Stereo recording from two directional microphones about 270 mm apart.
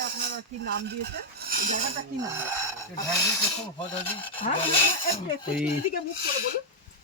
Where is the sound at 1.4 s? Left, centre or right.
Right.